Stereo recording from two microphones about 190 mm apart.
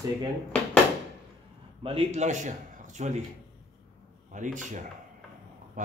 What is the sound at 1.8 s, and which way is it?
A man's voice, 35° right (ahead or behind).